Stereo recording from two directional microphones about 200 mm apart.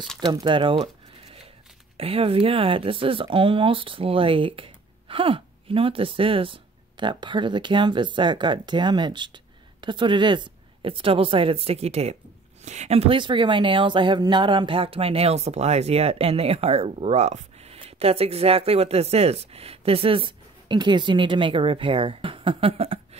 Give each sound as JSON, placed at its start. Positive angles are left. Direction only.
{"t": 0.2, "sound": "speech", "side_deg": -20}
{"t": 2.0, "sound": "speech", "side_deg": -30}